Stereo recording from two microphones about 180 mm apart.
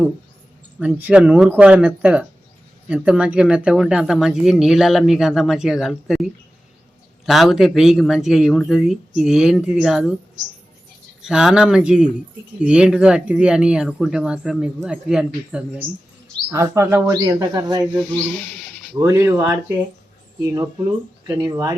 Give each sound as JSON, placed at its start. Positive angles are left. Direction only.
{"t": 0.8, "sound": "speech", "side_deg": -10}
{"t": 7.3, "sound": "speech", "side_deg": 0}
{"t": 11.2, "sound": "speech", "side_deg": -5}
{"t": 16.5, "sound": "speech", "side_deg": -15}
{"t": 18.9, "sound": "speech", "side_deg": -20}